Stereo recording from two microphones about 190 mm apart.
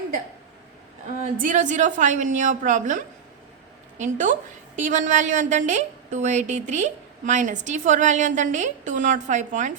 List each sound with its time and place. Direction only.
1.2 s a woman's voice: 40° right (ahead or behind)